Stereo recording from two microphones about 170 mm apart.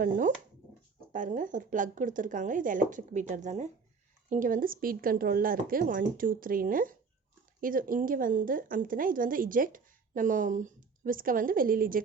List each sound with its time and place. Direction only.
0.0 s a woman's voice: 50° right (ahead or behind)